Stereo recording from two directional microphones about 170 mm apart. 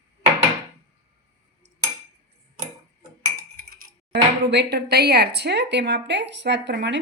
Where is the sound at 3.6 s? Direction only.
60° right (ahead or behind).